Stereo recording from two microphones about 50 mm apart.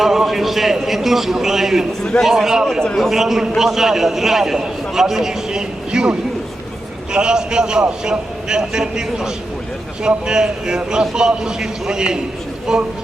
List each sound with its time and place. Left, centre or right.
0.0 s a man's voice: centre
2.8 s a man's voice: centre
3.1 s a man's voice: centre